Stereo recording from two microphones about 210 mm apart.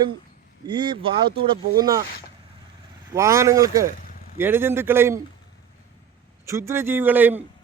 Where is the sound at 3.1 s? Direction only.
15° right (ahead or behind).